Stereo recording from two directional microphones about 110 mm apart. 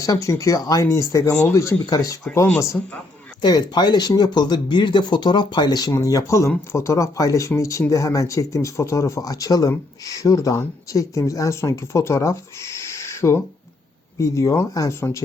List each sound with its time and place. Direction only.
0.0 s speech: 30° left (ahead or behind)
3.4 s speech: 40° left (ahead or behind)